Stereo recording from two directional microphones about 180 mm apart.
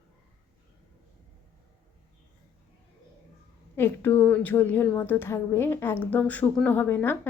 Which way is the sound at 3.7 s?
10° left (ahead or behind).